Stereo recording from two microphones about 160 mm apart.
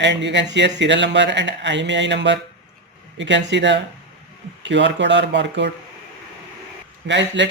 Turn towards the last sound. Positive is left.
turn(degrees=-90)